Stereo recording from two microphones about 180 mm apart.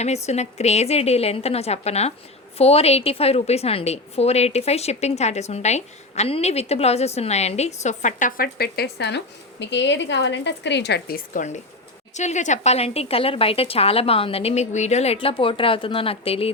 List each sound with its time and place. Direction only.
0.0 s a woman's voice: 40° left (ahead or behind); by 11.2 s 70° left (ahead or behind)
12.1 s a woman's voice: 40° left (ahead or behind)